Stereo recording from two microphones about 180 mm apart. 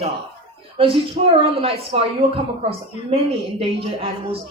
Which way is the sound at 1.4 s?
30° right (ahead or behind).